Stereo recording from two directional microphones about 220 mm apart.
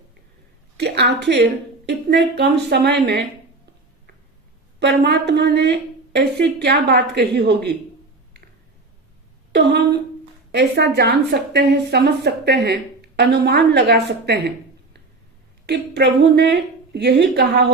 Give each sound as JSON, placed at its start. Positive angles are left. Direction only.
{"t": 0.8, "sound": "a woman's voice", "side_deg": -50}
{"t": 4.8, "sound": "a woman's voice", "side_deg": -50}
{"t": 9.5, "sound": "a woman's voice", "side_deg": -50}
{"t": 15.6, "sound": "a woman's voice", "side_deg": -50}